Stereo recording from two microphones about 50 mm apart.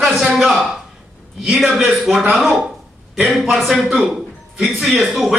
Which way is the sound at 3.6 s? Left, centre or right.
Centre.